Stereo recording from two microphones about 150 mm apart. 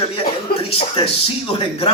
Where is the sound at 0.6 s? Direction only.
40° left (ahead or behind).